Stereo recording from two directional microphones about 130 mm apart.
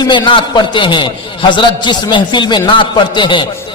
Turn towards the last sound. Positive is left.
turn(degrees=40)  # may be behind; listen again after turning